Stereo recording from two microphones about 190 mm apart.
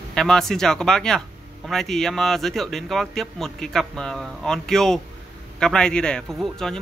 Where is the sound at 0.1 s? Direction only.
5° left (ahead or behind).